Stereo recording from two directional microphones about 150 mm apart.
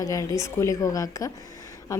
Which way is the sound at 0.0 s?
20° left (ahead or behind).